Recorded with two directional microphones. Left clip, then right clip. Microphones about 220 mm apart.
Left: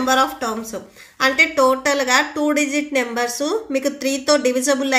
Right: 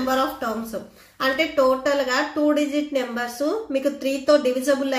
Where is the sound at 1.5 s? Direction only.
45° left (ahead or behind).